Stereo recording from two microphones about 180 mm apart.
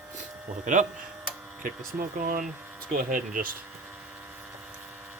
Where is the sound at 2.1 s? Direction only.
55° right (ahead or behind).